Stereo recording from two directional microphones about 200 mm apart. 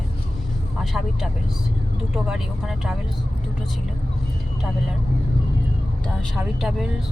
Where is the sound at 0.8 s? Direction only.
Centre (ahead or behind).